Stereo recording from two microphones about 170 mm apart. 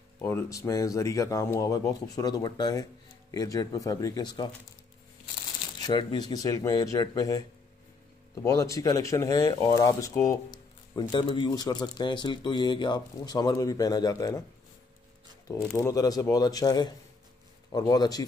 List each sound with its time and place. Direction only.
0.2 s speech: 15° left (ahead or behind)
5.8 s speech: 25° left (ahead or behind)
15.8 s speech: 20° left (ahead or behind)